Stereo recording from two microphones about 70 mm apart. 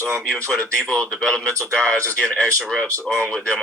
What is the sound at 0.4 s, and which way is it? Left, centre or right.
Speech, centre.